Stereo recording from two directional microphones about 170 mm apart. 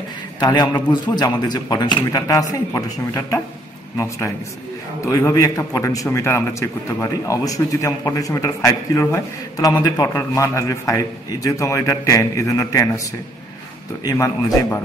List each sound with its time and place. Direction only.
0.4 s a man's voice: 25° left (ahead or behind)
5.0 s a man's voice: 20° left (ahead or behind)
14.0 s a man's voice: 15° left (ahead or behind)